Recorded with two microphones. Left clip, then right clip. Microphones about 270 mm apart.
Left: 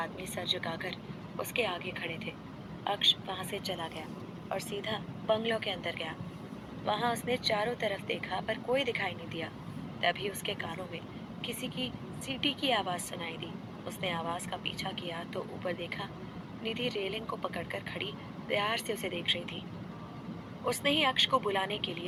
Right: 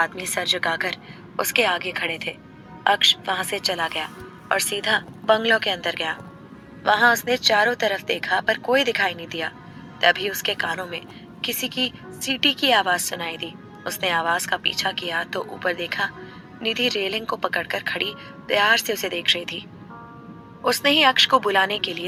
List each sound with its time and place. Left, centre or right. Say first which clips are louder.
0.0 s a woman's voice: right 14 dB; right
20.7 s a woman's voice: right 12 dB; right